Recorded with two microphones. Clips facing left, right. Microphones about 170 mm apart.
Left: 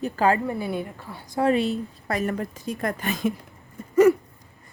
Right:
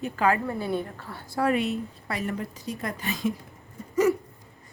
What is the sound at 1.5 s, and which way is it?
Speech, 30° left (ahead or behind).